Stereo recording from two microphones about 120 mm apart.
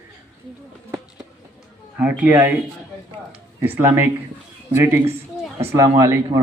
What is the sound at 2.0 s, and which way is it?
Speech, 15° right (ahead or behind).